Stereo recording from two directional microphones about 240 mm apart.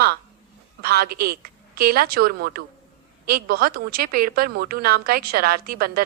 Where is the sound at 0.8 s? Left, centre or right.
Right.